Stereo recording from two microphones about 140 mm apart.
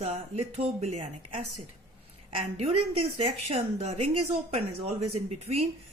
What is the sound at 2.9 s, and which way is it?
A woman's voice, 45° right (ahead or behind).